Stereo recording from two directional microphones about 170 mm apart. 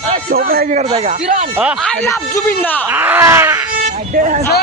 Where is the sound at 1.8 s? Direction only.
15° left (ahead or behind).